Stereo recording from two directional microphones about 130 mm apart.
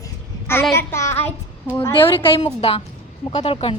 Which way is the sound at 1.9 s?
45° left (ahead or behind).